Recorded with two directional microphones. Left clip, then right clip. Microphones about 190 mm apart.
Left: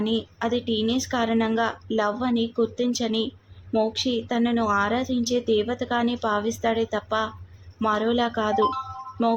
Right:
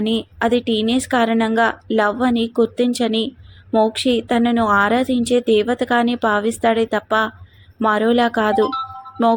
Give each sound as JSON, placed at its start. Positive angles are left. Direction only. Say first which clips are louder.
{"t": 0.0, "sound": "a woman's voice", "louder": "right 7 dB", "side_deg": -20}